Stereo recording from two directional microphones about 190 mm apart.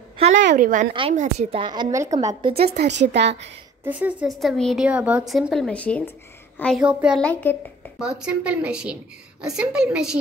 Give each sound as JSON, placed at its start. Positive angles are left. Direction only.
{"t": 0.6, "sound": "a woman's voice", "side_deg": -45}
{"t": 2.5, "sound": "speech", "side_deg": -60}
{"t": 3.8, "sound": "a woman's voice", "side_deg": -10}
{"t": 7.2, "sound": "speech", "side_deg": 5}
{"t": 8.0, "sound": "a woman's voice", "side_deg": -5}